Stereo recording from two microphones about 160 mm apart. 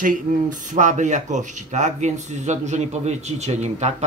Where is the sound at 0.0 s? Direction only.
55° right (ahead or behind).